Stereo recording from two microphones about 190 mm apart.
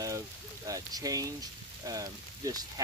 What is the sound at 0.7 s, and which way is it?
Speech, 20° right (ahead or behind).